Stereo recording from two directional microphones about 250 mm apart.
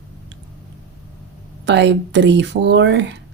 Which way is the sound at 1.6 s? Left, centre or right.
Right.